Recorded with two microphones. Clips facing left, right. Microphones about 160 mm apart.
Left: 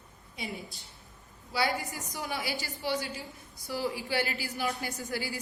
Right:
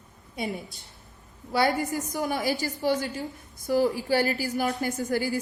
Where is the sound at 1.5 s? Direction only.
45° right (ahead or behind).